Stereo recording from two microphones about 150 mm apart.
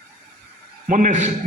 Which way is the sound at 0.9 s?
55° right (ahead or behind).